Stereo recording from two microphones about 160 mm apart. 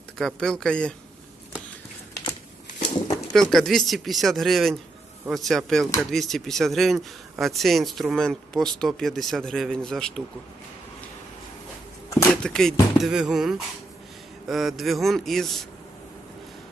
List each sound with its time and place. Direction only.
0.2 s speech: 5° left (ahead or behind)
2.7 s a sound: 45° left (ahead or behind)
3.3 s speech: 5° left (ahead or behind)
12.3 s speech: 5° left (ahead or behind)